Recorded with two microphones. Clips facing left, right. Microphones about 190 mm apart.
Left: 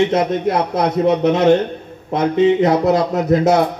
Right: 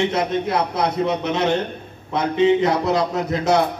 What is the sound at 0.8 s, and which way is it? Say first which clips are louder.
Speech: left 6 dB; 50° left (ahead or behind).